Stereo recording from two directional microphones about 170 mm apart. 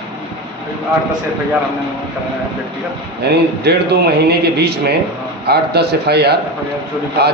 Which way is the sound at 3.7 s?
75° right (ahead or behind).